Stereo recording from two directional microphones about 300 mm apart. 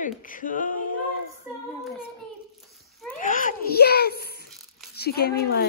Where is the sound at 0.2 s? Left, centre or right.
Left.